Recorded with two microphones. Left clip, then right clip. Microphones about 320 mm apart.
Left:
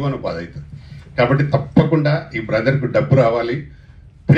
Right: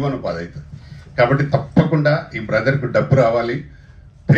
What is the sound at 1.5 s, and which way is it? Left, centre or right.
A man's voice, left.